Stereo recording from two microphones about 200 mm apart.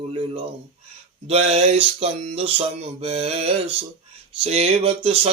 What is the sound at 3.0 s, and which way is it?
Speech, 30° right (ahead or behind).